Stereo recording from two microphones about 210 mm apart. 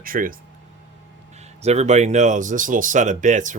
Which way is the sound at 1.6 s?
30° right (ahead or behind).